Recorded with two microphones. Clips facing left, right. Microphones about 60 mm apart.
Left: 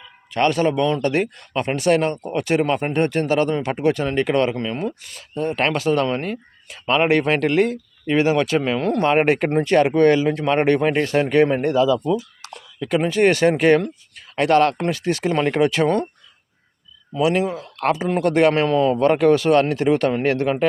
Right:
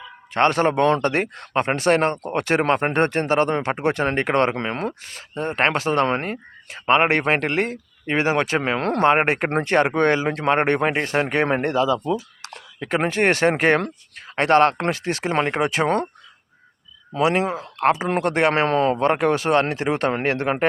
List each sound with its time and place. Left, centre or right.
0.3 s a man's voice: right
1.0 s speech: right
5.0 s speech: right
8.8 s a man's voice: right
9.0 s speech: right
11.4 s speech: right
17.1 s speech: right
18.7 s a man's voice: right
18.9 s speech: right